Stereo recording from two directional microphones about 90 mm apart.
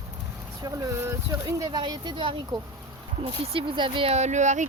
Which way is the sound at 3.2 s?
80° right.